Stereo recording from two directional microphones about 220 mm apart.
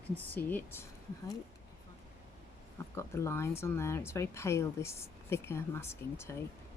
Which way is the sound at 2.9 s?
10° left (ahead or behind).